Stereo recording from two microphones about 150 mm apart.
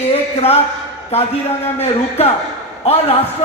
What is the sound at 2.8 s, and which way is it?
Speech, 45° left (ahead or behind).